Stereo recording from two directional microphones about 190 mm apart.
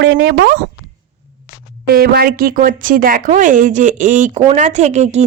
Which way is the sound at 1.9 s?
50° right (ahead or behind).